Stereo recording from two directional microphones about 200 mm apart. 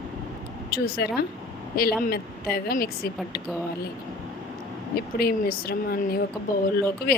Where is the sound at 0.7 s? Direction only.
50° left (ahead or behind).